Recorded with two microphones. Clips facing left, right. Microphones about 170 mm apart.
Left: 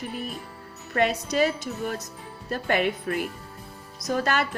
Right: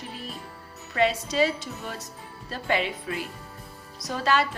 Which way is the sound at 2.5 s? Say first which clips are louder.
Left 3 dB; 55° left (ahead or behind).